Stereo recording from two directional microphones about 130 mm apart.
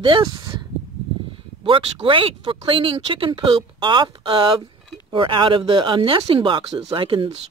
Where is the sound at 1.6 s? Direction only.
40° right (ahead or behind).